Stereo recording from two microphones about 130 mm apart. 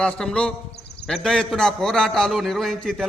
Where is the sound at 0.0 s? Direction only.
5° left (ahead or behind).